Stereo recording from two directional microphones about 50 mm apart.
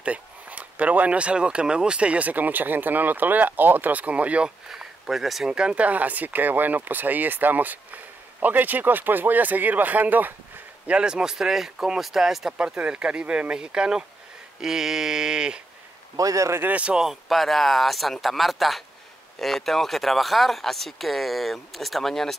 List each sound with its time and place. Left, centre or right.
0.0 s speech: right
4.6 s speech: centre
5.5 s speech: centre; by 10.3 s right
10.9 s speech: centre
12.5 s speech: right
16.6 s speech: right
16.9 s speech: centre
17.3 s speech: centre